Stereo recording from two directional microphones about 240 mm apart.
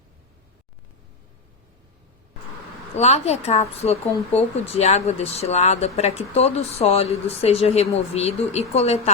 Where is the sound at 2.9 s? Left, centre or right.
Left.